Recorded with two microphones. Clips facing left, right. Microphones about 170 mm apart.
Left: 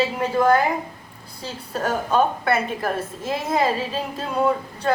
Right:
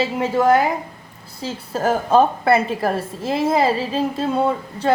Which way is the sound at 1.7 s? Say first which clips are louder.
Right 5 dB; 30° right (ahead or behind).